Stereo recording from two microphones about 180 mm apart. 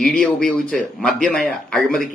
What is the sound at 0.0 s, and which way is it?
A man's voice, 5° left (ahead or behind).